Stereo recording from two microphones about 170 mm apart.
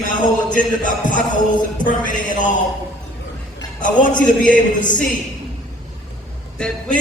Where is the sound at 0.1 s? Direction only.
50° left (ahead or behind).